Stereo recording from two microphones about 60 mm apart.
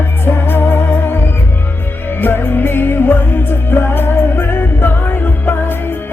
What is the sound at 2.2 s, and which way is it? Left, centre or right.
Music, left.